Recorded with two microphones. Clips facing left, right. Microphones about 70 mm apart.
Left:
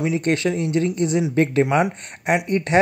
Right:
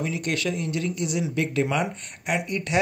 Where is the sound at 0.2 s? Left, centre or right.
Left.